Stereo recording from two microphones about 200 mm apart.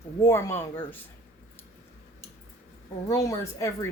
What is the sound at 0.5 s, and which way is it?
Speech, 10° left (ahead or behind).